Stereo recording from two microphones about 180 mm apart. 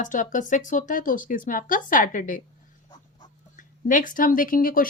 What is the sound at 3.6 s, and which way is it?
Speech, 45° left (ahead or behind).